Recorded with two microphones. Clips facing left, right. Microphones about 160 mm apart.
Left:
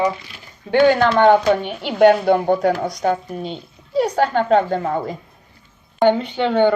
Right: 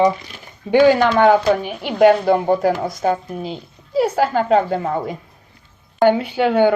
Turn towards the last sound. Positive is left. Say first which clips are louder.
# right 1 dB
turn(degrees=-10)  # may be behind; listen again after turning